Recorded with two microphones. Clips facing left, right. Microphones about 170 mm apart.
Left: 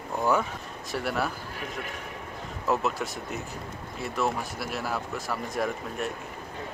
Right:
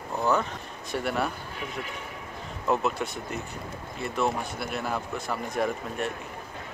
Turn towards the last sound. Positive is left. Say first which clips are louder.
# right 1 dB
turn(degrees=0)  # may be behind; listen again after turning